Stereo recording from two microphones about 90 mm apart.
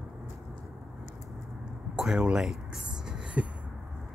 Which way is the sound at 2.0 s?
10° right (ahead or behind).